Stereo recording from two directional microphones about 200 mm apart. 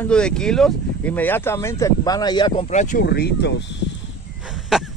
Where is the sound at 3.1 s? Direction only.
55° left (ahead or behind).